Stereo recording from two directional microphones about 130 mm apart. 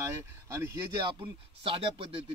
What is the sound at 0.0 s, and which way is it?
Speech, 25° right (ahead or behind).